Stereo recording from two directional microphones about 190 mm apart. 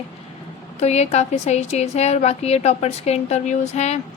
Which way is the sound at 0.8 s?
35° left (ahead or behind).